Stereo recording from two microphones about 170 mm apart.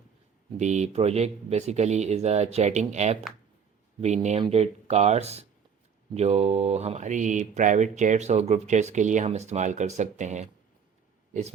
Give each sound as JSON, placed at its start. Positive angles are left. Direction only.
{"t": 0.5, "sound": "speech", "side_deg": -45}